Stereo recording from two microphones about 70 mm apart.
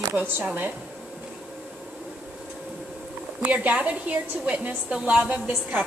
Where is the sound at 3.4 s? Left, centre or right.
Right.